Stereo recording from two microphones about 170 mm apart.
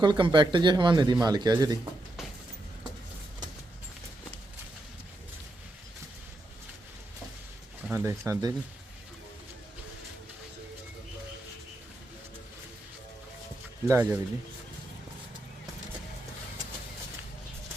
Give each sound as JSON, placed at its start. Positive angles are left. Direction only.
{"t": 0.0, "sound": "speech", "side_deg": -25}
{"t": 7.9, "sound": "speech", "side_deg": -15}
{"t": 13.8, "sound": "speech", "side_deg": -15}